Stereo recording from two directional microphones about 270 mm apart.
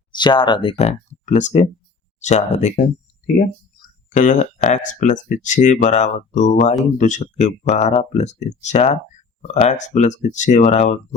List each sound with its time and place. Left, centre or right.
0.1 s speech: centre
4.1 s speech: left